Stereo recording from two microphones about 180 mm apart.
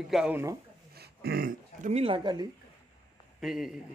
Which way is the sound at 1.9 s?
30° right (ahead or behind).